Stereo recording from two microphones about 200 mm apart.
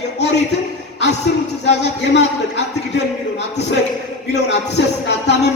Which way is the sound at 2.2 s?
60° left (ahead or behind).